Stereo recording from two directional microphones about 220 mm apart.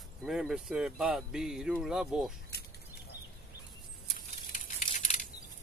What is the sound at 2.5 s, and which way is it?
Bird, 45° left (ahead or behind).